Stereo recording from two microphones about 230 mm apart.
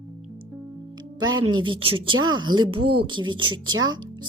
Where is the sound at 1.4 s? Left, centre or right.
Right.